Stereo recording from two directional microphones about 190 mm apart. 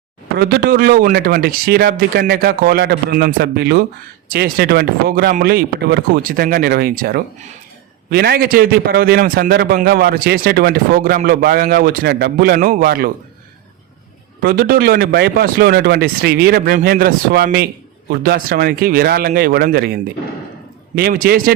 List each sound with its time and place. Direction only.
0.3 s a man's voice: 55° right (ahead or behind)
12.5 s speech: 45° right (ahead or behind)
14.4 s a man's voice: 55° right (ahead or behind)